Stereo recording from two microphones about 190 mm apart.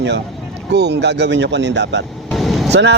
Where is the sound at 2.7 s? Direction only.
65° right (ahead or behind).